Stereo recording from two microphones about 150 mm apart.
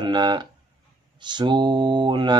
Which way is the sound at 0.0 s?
30° right (ahead or behind).